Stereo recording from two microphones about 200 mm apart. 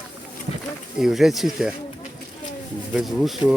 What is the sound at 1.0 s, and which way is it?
Speech, centre (ahead or behind).